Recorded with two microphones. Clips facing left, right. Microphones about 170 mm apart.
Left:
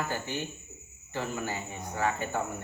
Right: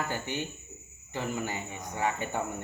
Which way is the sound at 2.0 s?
20° right (ahead or behind).